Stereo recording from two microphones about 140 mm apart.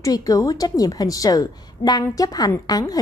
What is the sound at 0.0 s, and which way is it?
A woman's voice, 25° left (ahead or behind).